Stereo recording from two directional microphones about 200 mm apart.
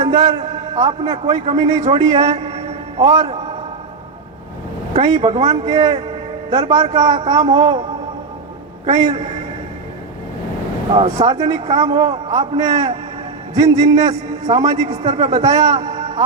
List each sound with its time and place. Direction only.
0.0 s a man's voice: 20° right (ahead or behind)
2.5 s a sound: 25° right (ahead or behind)
5.1 s a man's voice: 25° right (ahead or behind)
8.9 s a man's voice: 20° right (ahead or behind)
10.9 s a man's voice: 20° right (ahead or behind)